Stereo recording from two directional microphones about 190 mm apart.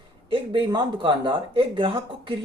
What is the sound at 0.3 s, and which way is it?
Speech, 25° right (ahead or behind).